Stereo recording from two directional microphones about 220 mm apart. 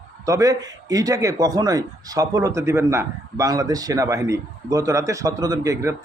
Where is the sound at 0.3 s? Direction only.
15° right (ahead or behind).